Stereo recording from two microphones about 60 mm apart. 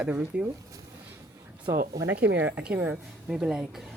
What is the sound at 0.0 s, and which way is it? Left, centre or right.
Speech, right.